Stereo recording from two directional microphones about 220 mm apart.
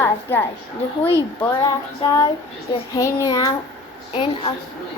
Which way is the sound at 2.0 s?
15° left (ahead or behind).